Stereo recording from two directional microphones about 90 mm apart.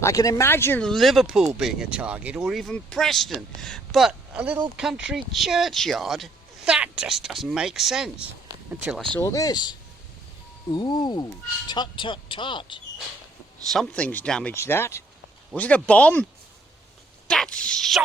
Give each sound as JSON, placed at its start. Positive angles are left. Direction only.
{"t": 0.0, "sound": "speech", "side_deg": 40}
{"t": 0.4, "sound": "speech", "side_deg": 25}
{"t": 0.8, "sound": "speech", "side_deg": 5}
{"t": 2.5, "sound": "speech", "side_deg": 0}
{"t": 9.2, "sound": "speech", "side_deg": 40}
{"t": 13.9, "sound": "speech", "side_deg": 15}
{"t": 14.5, "sound": "speech", "side_deg": 30}
{"t": 15.5, "sound": "speech", "side_deg": 15}
{"t": 17.2, "sound": "speech", "side_deg": 5}